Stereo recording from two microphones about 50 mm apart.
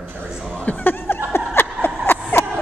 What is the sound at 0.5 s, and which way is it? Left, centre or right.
Chuckle, left.